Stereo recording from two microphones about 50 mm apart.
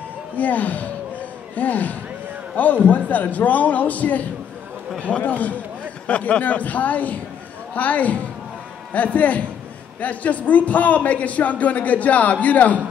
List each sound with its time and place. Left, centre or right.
0.4 s a man's voice: left